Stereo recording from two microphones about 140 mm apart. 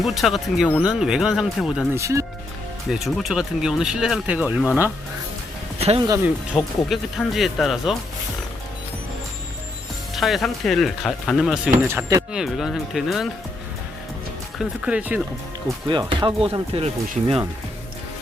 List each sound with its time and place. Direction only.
0.0 s speech: centre (ahead or behind)
2.0 s speech: 20° right (ahead or behind)
2.9 s speech: centre (ahead or behind)
6.2 s speech: 5° right (ahead or behind)
10.2 s speech: centre (ahead or behind)
11.9 s speech: 20° right (ahead or behind)
12.3 s speech: centre (ahead or behind)
14.6 s speech: 10° right (ahead or behind)
15.9 s speech: 35° right (ahead or behind)